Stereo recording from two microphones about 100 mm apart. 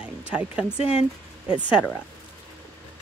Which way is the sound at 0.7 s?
75° left (ahead or behind).